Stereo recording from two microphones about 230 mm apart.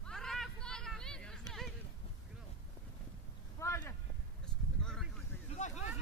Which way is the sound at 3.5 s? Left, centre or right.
Centre.